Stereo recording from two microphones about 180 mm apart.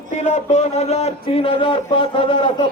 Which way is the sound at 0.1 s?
40° left (ahead or behind).